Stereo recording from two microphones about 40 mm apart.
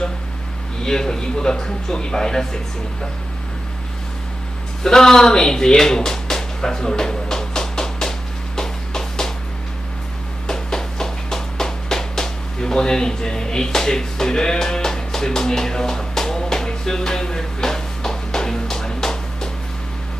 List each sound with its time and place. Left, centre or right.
0.9 s a man's voice: centre
4.8 s speech: centre
8.5 s music: centre
10.4 s a sound: centre